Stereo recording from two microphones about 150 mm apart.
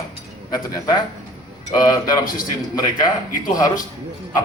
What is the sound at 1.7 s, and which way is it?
A man's voice, 25° left (ahead or behind).